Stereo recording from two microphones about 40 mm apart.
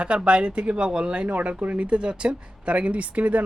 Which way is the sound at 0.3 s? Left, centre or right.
Right.